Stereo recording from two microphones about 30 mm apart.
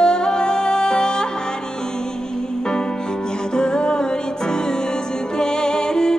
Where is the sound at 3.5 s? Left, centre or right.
Left.